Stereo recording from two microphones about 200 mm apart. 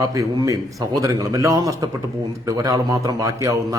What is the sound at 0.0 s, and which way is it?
A man's voice, 15° right (ahead or behind).